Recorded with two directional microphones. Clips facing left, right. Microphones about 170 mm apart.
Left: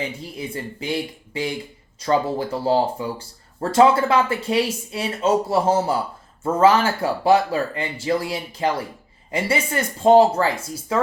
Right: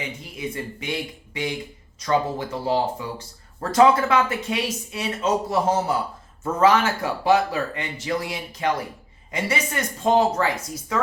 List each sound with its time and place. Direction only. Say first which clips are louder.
0.3 s speech: right 3 dB; 30° left (ahead or behind)